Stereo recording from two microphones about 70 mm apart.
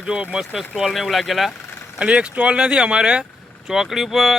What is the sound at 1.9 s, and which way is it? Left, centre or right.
Speech, centre.